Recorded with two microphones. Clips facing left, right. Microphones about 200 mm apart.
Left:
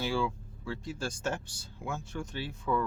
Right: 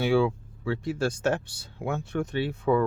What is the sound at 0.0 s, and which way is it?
Speech, 60° right (ahead or behind).